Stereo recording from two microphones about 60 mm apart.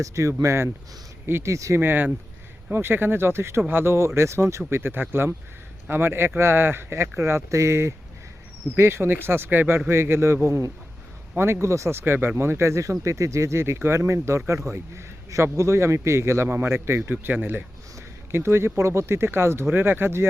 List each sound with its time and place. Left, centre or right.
0.0 s speech: right
1.5 s speech: right
1.8 s speech: right
11.6 s speech: right
16.5 s speech: right
18.3 s speech: right